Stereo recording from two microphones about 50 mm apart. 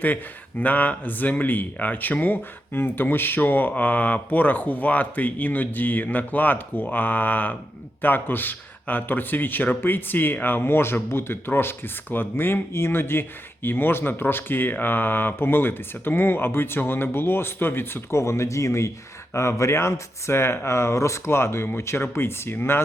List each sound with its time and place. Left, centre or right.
0.6 s speech: left
18.1 s speech: left
19.3 s speech: left
20.7 s speech: left
21.2 s speech: left